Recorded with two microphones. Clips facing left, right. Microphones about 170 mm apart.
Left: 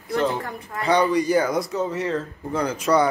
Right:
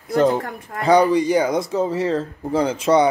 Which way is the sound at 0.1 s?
45° right (ahead or behind).